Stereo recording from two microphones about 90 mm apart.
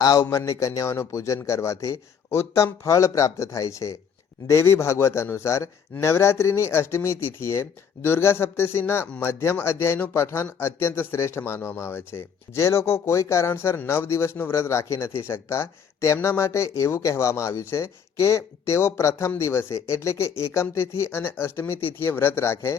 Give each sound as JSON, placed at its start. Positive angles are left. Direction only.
{"t": 0.0, "sound": "a man's voice", "side_deg": 40}